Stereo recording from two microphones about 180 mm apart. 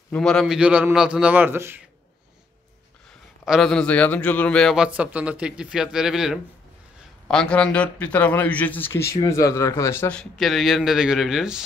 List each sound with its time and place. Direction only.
0.1 s a man's voice: 5° left (ahead or behind); by 1.8 s 10° right (ahead or behind)
3.4 s a man's voice: centre (ahead or behind)
10.3 s a man's voice: centre (ahead or behind)